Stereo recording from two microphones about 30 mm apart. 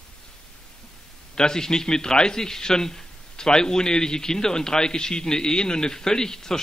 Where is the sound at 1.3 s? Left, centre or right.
Left.